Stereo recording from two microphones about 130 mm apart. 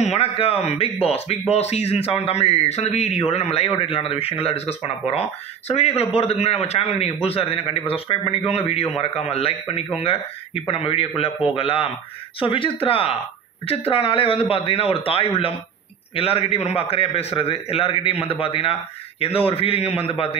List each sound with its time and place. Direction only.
0.0 s speech: 55° left (ahead or behind)